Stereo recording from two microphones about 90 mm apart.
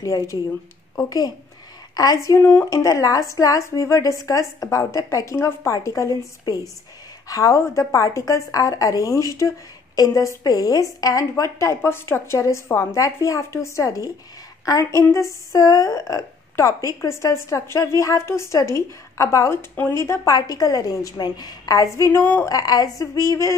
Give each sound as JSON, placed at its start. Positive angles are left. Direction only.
{"t": 0.0, "sound": "a woman's voice", "side_deg": 35}
{"t": 2.0, "sound": "a woman's voice", "side_deg": 40}
{"t": 7.2, "sound": "a woman's voice", "side_deg": 40}
{"t": 22.5, "sound": "a woman's voice", "side_deg": 45}